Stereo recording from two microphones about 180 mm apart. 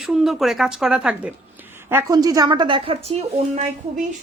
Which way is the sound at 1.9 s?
15° right (ahead or behind).